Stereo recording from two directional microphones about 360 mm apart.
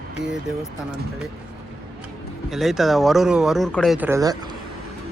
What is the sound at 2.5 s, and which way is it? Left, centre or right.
Speech, centre.